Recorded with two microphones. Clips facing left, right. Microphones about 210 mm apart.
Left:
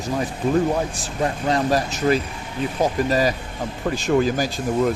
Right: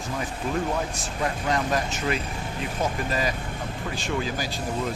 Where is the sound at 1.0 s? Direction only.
35° left (ahead or behind).